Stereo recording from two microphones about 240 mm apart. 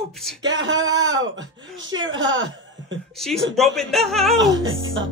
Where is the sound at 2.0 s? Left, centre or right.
Right.